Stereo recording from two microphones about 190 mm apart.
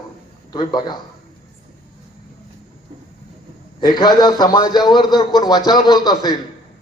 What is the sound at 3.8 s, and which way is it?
A man's voice, 20° left (ahead or behind).